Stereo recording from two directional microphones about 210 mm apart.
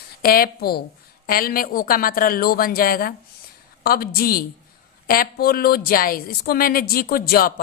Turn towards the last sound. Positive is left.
turn(degrees=45)  # may be behind; listen again after turning